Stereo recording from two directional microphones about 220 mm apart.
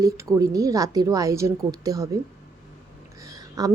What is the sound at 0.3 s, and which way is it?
A woman's voice, 15° right (ahead or behind).